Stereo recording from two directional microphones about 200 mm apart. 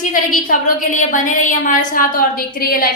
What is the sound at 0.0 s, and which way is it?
A woman's voice, 40° left (ahead or behind).